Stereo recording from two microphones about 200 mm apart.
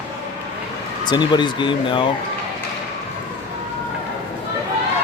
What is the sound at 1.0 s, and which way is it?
Speech, 20° left (ahead or behind).